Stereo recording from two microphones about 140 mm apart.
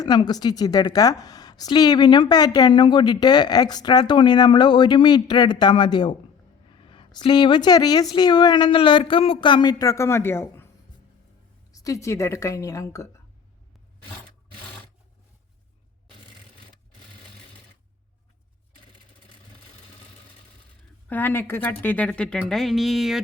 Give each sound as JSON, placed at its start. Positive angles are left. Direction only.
{"t": 0.0, "sound": "a woman's voice", "side_deg": 30}
{"t": 11.7, "sound": "a woman's voice", "side_deg": 25}
{"t": 21.1, "sound": "a woman's voice", "side_deg": 15}